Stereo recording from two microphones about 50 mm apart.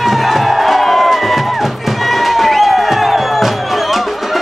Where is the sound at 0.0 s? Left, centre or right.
Centre.